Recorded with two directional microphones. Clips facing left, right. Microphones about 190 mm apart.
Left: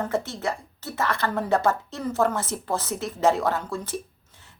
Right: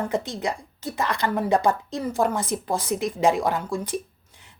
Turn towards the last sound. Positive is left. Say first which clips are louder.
# even
turn(degrees=-15)  # may be behind; listen again after turning